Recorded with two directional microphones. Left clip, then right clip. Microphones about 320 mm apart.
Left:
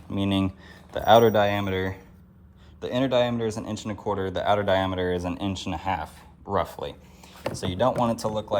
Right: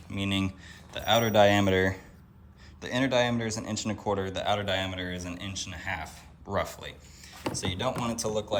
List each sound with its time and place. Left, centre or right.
0.3 s speech: centre
5.5 s speech: centre